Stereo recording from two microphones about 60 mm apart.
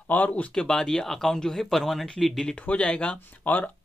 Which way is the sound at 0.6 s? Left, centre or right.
Centre.